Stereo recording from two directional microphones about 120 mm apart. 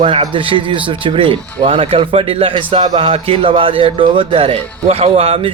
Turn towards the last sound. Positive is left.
turn(degrees=-55)  # may be behind; listen again after turning